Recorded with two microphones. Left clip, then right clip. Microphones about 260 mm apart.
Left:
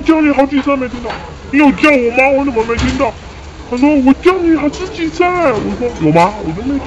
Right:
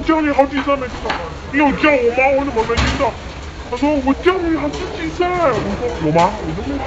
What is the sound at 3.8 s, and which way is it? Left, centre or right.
Speech, left.